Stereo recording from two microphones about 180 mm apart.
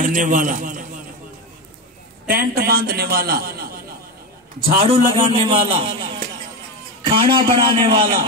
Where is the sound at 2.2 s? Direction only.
55° right (ahead or behind).